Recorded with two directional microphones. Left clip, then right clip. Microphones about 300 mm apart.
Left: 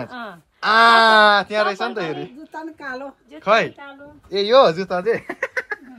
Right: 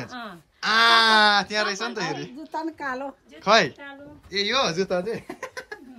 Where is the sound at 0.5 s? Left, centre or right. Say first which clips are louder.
Left 5 dB; centre.